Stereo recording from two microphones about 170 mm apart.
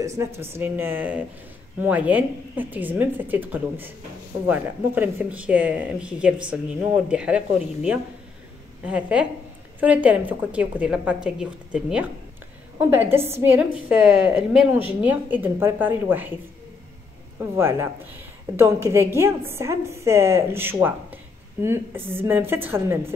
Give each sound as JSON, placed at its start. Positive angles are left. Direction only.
{"t": 0.0, "sound": "a woman's voice", "side_deg": -15}
{"t": 17.4, "sound": "a woman's voice", "side_deg": -15}